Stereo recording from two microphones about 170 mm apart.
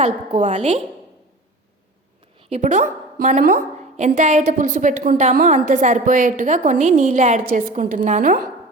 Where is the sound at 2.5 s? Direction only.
40° right (ahead or behind).